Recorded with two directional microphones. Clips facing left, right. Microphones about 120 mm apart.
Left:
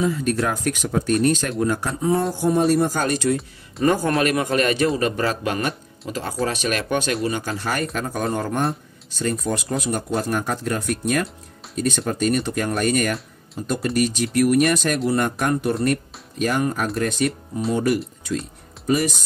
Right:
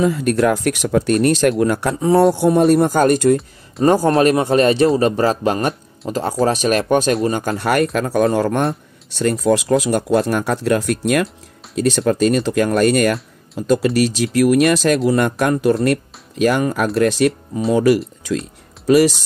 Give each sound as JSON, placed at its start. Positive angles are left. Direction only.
{"t": 0.0, "sound": "speech", "side_deg": -65}
{"t": 3.8, "sound": "a man's voice", "side_deg": -35}